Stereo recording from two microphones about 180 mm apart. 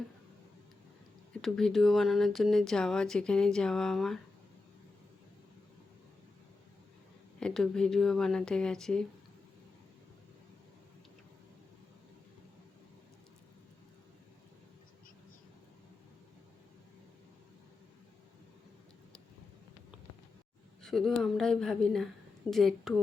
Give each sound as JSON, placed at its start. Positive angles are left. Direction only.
{"t": 1.3, "sound": "speech", "side_deg": 5}
{"t": 7.3, "sound": "speech", "side_deg": 5}
{"t": 20.8, "sound": "speech", "side_deg": 0}